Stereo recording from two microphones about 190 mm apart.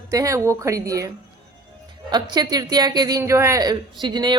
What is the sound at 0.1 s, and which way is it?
A woman's voice, 15° right (ahead or behind).